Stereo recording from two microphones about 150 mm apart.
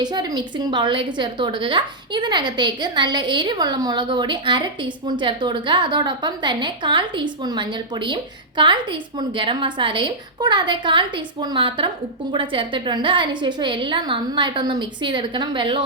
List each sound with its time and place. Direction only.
0.0 s a woman's voice: 25° right (ahead or behind)